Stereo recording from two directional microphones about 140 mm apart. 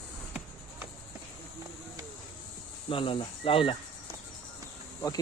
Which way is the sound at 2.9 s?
40° left (ahead or behind).